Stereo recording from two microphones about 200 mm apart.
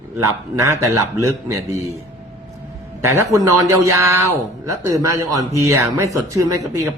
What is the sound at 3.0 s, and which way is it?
Speech, 15° right (ahead or behind).